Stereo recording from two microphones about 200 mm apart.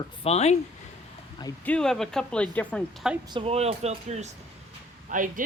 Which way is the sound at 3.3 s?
30° right (ahead or behind).